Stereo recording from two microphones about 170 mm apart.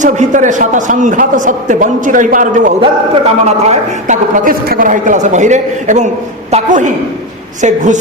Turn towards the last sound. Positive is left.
turn(degrees=-45)  # may be behind; listen again after turning